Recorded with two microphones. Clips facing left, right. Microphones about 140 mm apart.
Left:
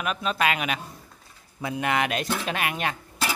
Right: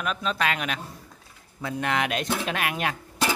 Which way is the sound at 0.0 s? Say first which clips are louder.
Left 1 dB; 5° left (ahead or behind).